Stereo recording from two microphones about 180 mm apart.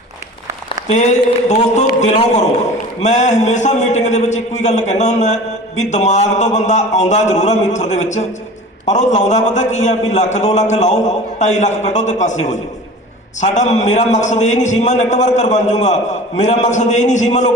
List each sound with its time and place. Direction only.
0.9 s a man's voice: 40° left (ahead or behind)